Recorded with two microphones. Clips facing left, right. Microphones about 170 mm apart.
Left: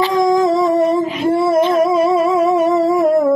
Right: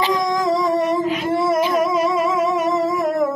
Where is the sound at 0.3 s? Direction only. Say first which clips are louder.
Left 6 dB; 25° left (ahead or behind).